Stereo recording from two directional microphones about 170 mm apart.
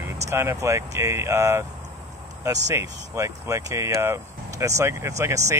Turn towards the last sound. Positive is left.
turn(degrees=-15)  # may be behind; listen again after turning